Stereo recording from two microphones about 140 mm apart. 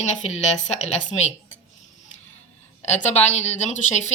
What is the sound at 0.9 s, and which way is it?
Speech, 55° left (ahead or behind).